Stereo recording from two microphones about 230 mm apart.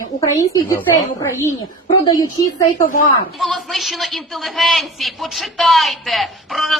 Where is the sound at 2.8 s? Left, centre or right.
Left.